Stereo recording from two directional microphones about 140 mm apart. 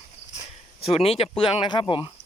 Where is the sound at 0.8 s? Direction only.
45° left (ahead or behind).